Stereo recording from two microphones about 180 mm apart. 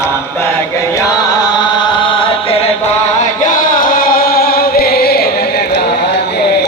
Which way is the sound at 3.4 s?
50° left (ahead or behind).